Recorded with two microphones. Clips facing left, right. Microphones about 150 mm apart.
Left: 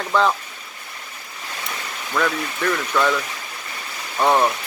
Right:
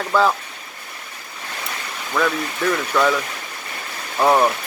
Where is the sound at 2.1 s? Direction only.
5° right (ahead or behind).